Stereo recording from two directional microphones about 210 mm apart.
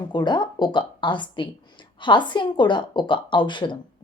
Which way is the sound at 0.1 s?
20° left (ahead or behind).